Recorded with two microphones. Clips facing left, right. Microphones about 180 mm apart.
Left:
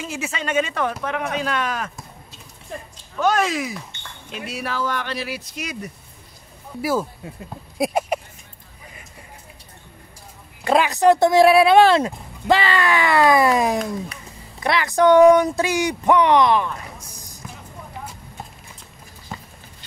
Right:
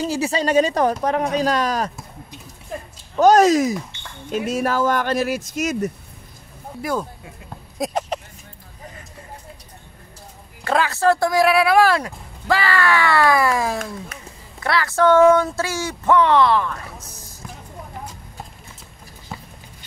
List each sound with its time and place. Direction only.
0.0 s speech: 35° right (ahead or behind)
3.2 s speech: 40° right (ahead or behind)
6.8 s speech: 5° left (ahead or behind)
7.7 s a sound: 10° left (ahead or behind)
10.6 s speech: 15° left (ahead or behind)
19.3 s horse: centre (ahead or behind)